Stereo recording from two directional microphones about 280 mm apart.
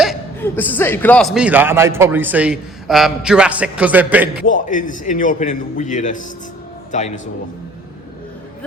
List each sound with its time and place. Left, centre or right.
0.0 s speech: centre
4.4 s a man's voice: left